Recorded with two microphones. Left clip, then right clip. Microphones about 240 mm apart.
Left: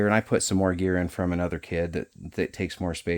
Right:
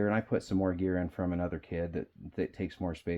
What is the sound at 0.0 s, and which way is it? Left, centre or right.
Speech, left.